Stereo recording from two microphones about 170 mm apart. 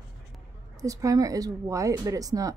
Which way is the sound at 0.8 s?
20° right (ahead or behind).